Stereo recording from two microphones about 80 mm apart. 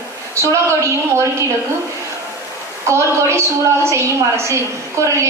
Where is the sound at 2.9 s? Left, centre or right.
Right.